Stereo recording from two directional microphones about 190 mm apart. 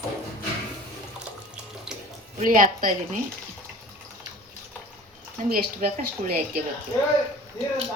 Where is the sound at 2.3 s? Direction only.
45° right (ahead or behind).